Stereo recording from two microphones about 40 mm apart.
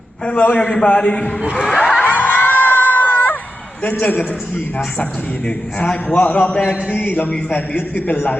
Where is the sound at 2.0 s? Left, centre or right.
Left.